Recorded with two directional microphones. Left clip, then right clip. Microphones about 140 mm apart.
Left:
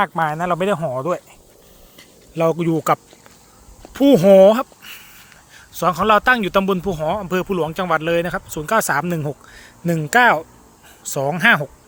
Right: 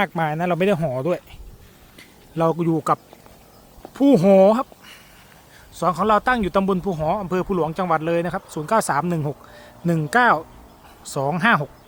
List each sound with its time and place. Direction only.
0.0 s speech: 25° right (ahead or behind)
2.4 s a man's voice: 5° left (ahead or behind)
4.8 s a sound: 10° left (ahead or behind)
5.5 s a man's voice: 15° left (ahead or behind)